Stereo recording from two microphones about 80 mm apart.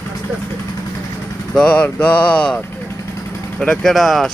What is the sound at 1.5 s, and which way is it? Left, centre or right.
Mantra, centre.